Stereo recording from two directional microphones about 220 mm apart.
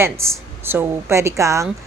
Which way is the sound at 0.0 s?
10° right (ahead or behind).